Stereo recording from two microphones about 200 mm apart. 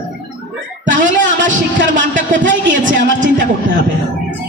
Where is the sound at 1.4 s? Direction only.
65° right (ahead or behind).